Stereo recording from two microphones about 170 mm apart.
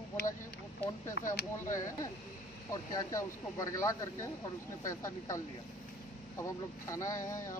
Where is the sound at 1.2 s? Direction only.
50° left (ahead or behind).